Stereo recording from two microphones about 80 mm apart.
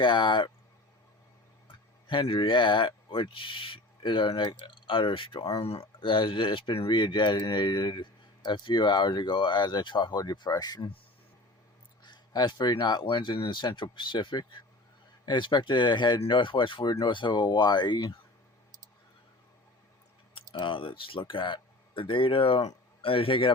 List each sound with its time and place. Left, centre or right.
0.0 s speech: left
2.0 s speech: left
8.4 s speech: left
12.0 s speech: left
16.9 s speech: left
20.3 s speech: left